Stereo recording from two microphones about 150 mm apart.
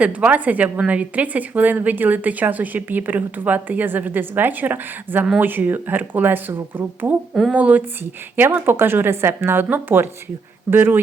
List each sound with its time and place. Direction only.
0.0 s a woman's voice: 10° right (ahead or behind)